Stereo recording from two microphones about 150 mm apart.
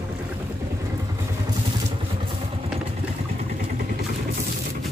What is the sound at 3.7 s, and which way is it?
Vehicle, 75° right (ahead or behind).